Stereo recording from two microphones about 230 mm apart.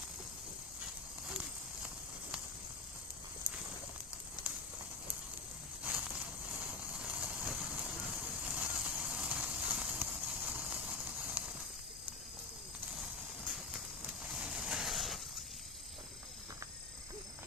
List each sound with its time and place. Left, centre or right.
5.8 s vehicle: centre
13.4 s vehicle: centre